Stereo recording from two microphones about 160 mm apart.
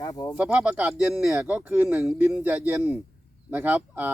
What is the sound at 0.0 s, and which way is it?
Speech, 25° left (ahead or behind).